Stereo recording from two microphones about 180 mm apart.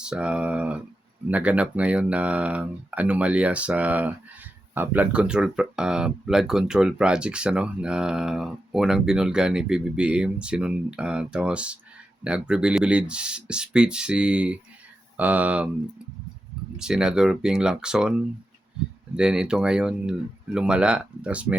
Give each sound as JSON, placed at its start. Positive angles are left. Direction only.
{"t": 0.0, "sound": "speech", "side_deg": -5}
{"t": 16.7, "sound": "speech", "side_deg": -5}
{"t": 19.1, "sound": "speech", "side_deg": -5}